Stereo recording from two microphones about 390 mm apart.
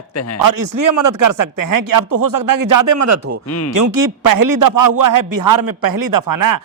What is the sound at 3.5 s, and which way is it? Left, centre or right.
Speech, left.